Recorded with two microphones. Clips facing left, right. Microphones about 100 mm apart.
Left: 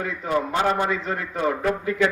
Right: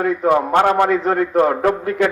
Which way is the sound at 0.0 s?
60° right (ahead or behind).